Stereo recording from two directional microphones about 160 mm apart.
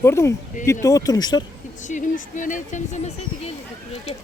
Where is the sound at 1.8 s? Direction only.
50° left (ahead or behind).